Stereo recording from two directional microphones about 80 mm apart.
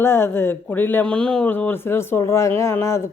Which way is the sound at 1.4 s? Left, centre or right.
Left.